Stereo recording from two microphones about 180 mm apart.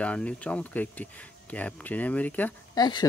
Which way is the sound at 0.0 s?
5° left (ahead or behind).